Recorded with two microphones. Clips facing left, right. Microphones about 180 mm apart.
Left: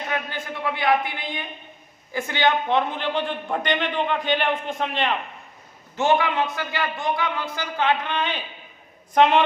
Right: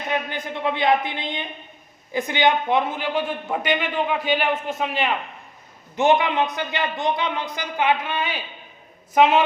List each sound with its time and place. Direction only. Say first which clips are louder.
0.1 s a man's voice: right 6 dB; 20° right (ahead or behind)
6.0 s a man's voice: right 2 dB; 20° right (ahead or behind); by 9.4 s 5° right (ahead or behind)